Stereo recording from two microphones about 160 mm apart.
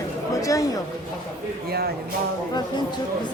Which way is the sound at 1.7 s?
75° right (ahead or behind).